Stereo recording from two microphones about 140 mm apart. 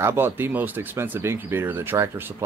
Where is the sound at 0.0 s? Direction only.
15° right (ahead or behind).